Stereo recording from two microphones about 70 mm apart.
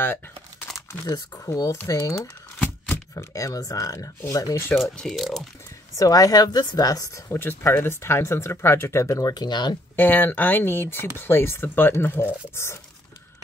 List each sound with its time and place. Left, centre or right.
1.0 s speech: left
3.2 s speech: left
5.0 s speech: centre
5.9 s speech: left
7.2 s speech: left
9.2 s speech: left
9.9 s speech: left